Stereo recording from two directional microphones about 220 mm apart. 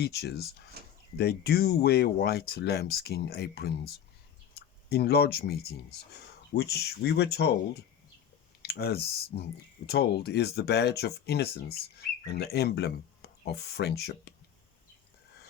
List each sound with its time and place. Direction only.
0.0 s speech: 45° left (ahead or behind)
4.9 s speech: 45° left (ahead or behind)